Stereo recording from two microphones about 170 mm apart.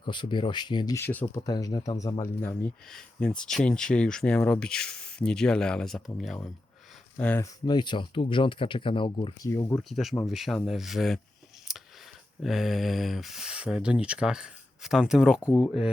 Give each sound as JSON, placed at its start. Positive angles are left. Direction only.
{"t": 0.0, "sound": "speech", "side_deg": 30}
{"t": 0.9, "sound": "speech", "side_deg": 10}
{"t": 1.4, "sound": "speech", "side_deg": 25}
{"t": 7.7, "sound": "speech", "side_deg": 25}
{"t": 9.4, "sound": "speech", "side_deg": 20}
{"t": 9.9, "sound": "speech", "side_deg": 0}
{"t": 11.7, "sound": "a sound", "side_deg": 0}
{"t": 12.4, "sound": "speech", "side_deg": 0}